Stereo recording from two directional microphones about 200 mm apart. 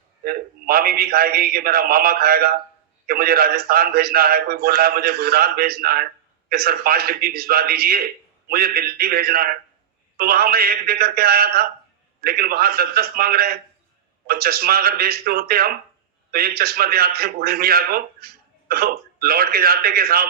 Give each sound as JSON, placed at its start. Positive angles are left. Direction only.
{"t": 0.3, "sound": "a man's voice", "side_deg": -50}